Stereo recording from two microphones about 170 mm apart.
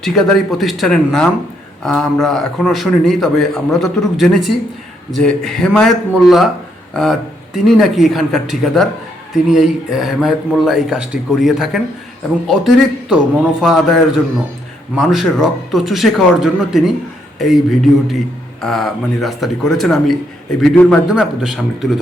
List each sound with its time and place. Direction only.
0.0 s a man's voice: centre (ahead or behind)